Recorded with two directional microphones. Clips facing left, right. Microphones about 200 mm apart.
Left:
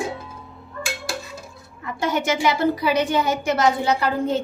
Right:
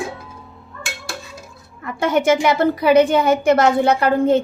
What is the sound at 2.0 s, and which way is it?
A woman's voice, 55° right (ahead or behind).